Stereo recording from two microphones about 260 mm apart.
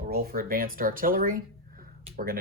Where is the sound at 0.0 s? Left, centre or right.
Right.